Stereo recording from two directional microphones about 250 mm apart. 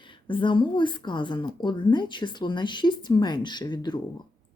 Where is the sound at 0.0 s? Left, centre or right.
Centre.